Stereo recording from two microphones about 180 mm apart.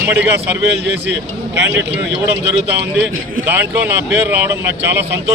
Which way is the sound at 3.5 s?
10° right (ahead or behind).